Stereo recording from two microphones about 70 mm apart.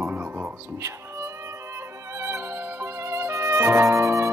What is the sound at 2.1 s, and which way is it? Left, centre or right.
Music, right.